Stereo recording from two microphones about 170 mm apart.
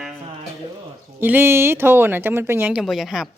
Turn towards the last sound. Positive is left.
turn(degrees=-5)  # may be behind; listen again after turning